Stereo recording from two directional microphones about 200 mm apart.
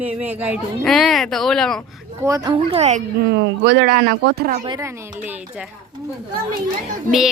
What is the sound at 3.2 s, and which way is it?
Speech, 60° right (ahead or behind).